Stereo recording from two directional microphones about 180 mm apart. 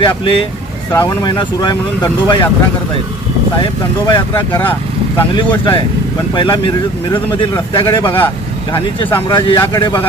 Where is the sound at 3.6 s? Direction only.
25° left (ahead or behind).